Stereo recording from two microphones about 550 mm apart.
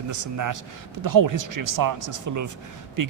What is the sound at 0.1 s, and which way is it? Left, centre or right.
A man's voice, right.